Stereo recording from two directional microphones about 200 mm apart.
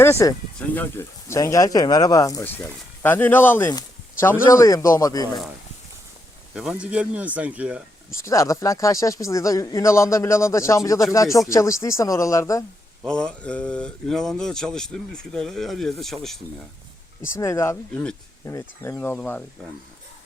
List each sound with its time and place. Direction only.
0.0 s speech: 15° left (ahead or behind)
6.5 s speech: 5° right (ahead or behind)
8.2 s speech: 15° left (ahead or behind)
13.0 s speech: 5° left (ahead or behind)
17.3 s speech: 15° left (ahead or behind)